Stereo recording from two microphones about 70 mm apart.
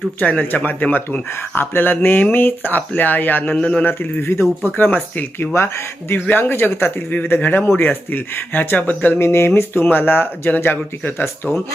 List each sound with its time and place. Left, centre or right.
0.2 s speech: left
3.5 s a man's voice: centre
3.8 s speech: left